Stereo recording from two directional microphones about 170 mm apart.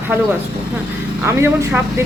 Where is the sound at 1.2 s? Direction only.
15° right (ahead or behind).